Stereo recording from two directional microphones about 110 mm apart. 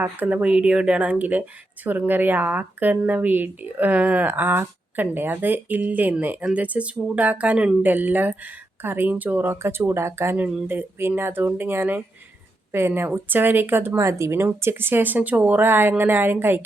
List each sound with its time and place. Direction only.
0.0 s speech: 15° right (ahead or behind)